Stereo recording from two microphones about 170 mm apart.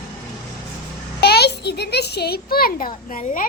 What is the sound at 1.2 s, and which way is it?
A child's voice, 75° left (ahead or behind).